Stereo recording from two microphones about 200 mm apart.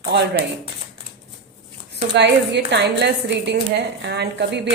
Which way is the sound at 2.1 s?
60° right (ahead or behind).